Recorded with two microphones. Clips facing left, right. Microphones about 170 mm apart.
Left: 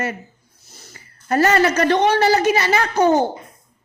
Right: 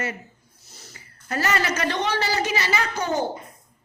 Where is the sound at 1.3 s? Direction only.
50° left (ahead or behind).